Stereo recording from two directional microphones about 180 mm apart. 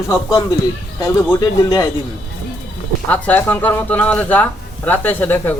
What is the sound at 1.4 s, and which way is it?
Speech, 20° left (ahead or behind).